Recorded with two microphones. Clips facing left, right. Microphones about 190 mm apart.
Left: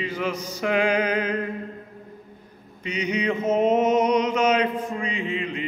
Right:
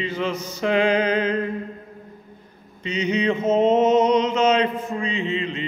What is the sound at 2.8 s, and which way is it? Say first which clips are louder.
Mantra: right 3 dB; 25° right (ahead or behind).